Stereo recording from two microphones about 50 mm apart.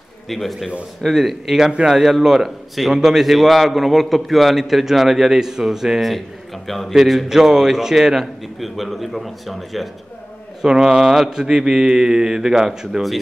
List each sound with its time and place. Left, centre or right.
0.3 s a man's voice: centre
1.6 s speech: centre
2.0 s a man's voice: centre
10.6 s speech: centre